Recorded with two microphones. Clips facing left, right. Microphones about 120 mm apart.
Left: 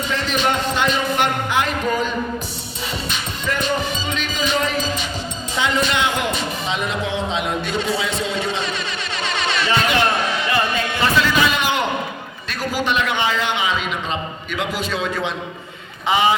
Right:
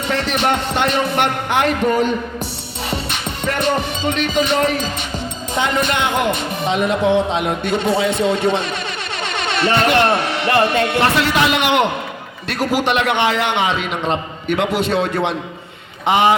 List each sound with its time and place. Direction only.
0.1 s speech: 65° right (ahead or behind)
2.9 s music: 65° right (ahead or behind)
5.5 s a man's voice: 55° right (ahead or behind)